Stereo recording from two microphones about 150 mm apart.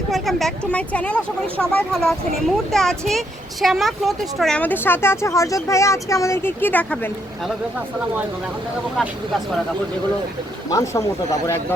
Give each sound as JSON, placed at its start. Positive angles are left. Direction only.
{"t": 0.1, "sound": "a sound", "side_deg": 0}
{"t": 0.7, "sound": "speech", "side_deg": 10}
{"t": 10.7, "sound": "speech", "side_deg": 20}